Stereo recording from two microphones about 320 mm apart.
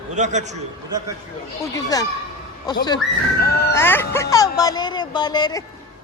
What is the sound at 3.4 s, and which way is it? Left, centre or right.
Speech, left.